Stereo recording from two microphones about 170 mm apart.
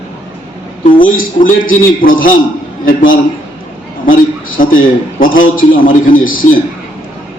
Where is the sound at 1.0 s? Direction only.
55° left (ahead or behind).